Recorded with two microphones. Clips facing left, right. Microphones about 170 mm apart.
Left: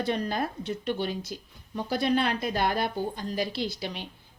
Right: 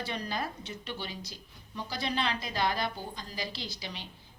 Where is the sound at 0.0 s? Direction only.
50° left (ahead or behind).